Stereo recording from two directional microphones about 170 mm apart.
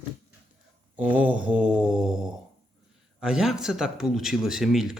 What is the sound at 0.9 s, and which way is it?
Mantra, 10° right (ahead or behind).